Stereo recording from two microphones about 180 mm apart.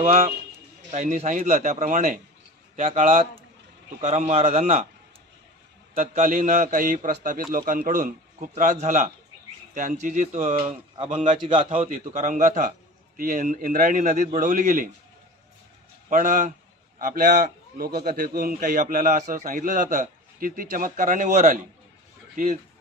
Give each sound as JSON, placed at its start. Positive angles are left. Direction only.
{"t": 0.0, "sound": "a man's voice", "side_deg": -50}
{"t": 4.0, "sound": "a man's voice", "side_deg": -35}
{"t": 5.9, "sound": "a man's voice", "side_deg": -45}
{"t": 11.1, "sound": "a man's voice", "side_deg": -45}
{"t": 11.4, "sound": "a man's voice", "side_deg": -30}
{"t": 16.1, "sound": "a man's voice", "side_deg": -45}